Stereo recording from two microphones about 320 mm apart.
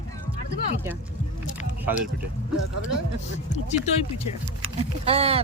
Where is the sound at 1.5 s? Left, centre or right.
Centre.